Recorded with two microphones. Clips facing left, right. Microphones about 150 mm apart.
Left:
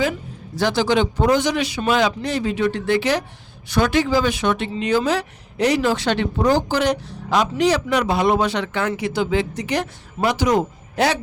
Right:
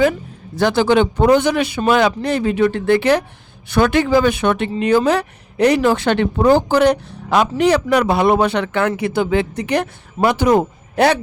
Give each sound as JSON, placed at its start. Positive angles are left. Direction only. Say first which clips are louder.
{"t": 0.6, "sound": "speech", "louder": "right 4 dB", "side_deg": -55}